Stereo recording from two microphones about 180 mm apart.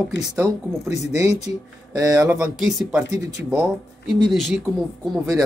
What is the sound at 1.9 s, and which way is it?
Speech, 5° right (ahead or behind).